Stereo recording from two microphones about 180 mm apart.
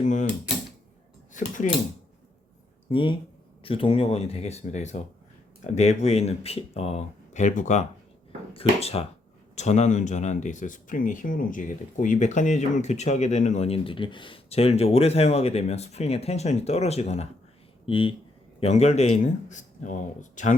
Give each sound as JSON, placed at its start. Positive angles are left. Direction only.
{"t": 0.0, "sound": "speech", "side_deg": 45}
{"t": 1.3, "sound": "speech", "side_deg": 45}
{"t": 2.9, "sound": "speech", "side_deg": 30}